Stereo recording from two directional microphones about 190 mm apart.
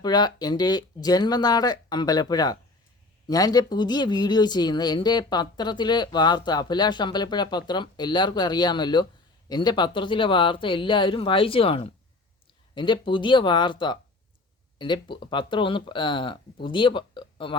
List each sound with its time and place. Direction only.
0.0 s speech: 20° left (ahead or behind)